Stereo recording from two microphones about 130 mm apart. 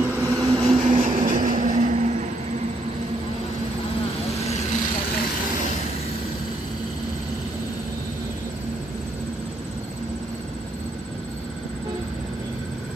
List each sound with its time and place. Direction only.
0.0 s vehicle: 15° right (ahead or behind)
0.3 s vehicle: 30° right (ahead or behind)
0.7 s vehicle: 60° right (ahead or behind)